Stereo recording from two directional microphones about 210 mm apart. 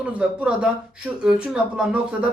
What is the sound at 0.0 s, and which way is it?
Speech, 5° right (ahead or behind).